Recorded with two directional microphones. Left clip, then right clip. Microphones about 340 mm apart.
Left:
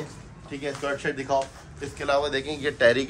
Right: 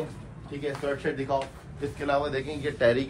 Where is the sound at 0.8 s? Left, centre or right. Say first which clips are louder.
Left 2 dB; left.